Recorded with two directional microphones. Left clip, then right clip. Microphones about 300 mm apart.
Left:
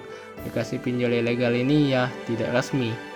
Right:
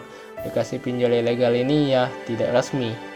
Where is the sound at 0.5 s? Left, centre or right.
Centre.